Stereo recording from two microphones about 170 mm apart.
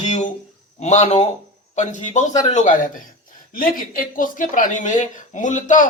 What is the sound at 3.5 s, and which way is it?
Speech, 55° left (ahead or behind).